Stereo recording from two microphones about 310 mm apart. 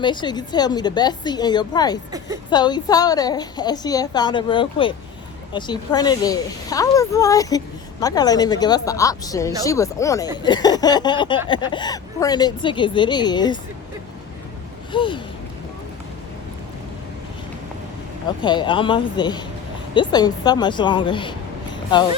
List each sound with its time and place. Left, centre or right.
0.0 s a woman's voice: centre
14.9 s a woman's voice: centre
18.4 s a woman's voice: centre